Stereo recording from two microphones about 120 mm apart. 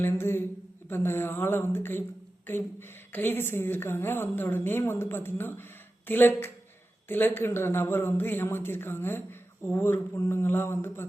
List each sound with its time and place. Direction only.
0.0 s a woman's voice: 20° left (ahead or behind)
3.1 s a woman's voice: 15° left (ahead or behind)